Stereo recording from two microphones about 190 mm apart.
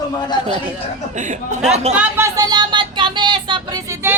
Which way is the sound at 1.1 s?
40° right (ahead or behind).